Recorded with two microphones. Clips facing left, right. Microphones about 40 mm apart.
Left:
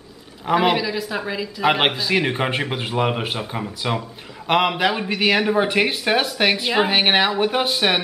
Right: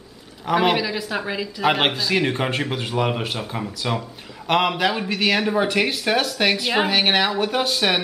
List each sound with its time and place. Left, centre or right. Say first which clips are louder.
0.5 s speech: left 1 dB; centre
1.6 s a man's voice: left 1 dB; centre